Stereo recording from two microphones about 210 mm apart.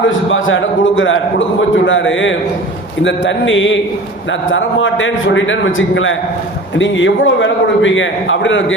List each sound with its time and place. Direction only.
0.3 s a man's voice: 65° left (ahead or behind)